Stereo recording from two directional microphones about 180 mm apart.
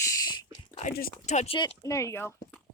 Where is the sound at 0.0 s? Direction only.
20° left (ahead or behind).